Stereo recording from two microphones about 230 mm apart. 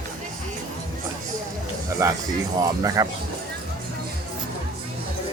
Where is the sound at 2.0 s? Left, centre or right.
Centre.